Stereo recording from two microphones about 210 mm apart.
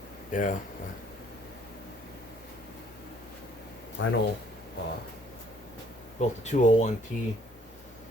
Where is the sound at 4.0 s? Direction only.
60° left (ahead or behind).